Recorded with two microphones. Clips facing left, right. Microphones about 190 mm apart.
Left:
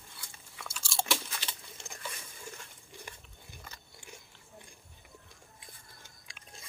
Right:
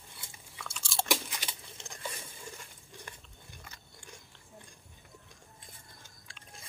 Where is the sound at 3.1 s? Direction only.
10° left (ahead or behind).